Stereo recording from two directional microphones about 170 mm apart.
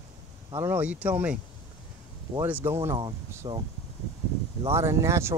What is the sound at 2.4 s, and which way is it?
Speech, 15° right (ahead or behind).